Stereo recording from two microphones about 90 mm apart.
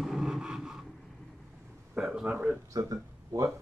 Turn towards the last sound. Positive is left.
turn(degrees=-40)  # may be behind; listen again after turning